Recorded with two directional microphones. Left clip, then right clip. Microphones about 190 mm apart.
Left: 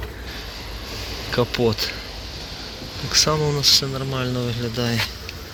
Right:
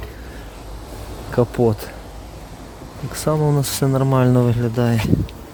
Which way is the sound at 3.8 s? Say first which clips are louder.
Right 7 dB; 45° right (ahead or behind).